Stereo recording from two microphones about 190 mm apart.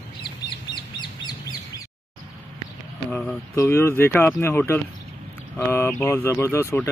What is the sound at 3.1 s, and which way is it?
Speech, 5° left (ahead or behind).